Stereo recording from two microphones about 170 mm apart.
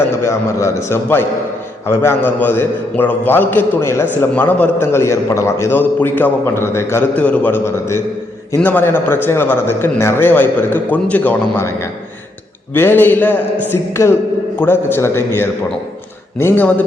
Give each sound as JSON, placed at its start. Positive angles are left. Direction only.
{"t": 0.2, "sound": "a man's voice", "side_deg": 15}
{"t": 12.7, "sound": "a man's voice", "side_deg": 10}